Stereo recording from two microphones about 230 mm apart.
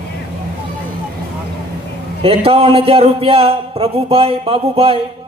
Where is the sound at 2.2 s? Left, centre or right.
Right.